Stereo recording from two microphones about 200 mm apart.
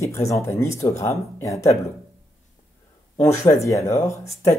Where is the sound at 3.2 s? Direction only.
15° left (ahead or behind).